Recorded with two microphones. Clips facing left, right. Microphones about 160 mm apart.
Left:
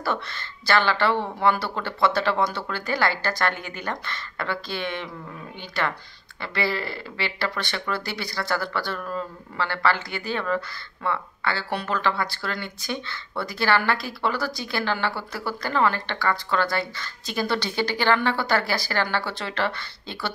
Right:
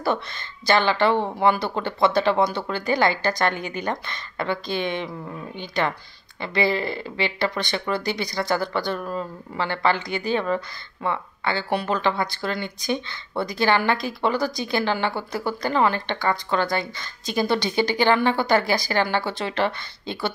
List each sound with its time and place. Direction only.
0.0 s speech: 15° right (ahead or behind)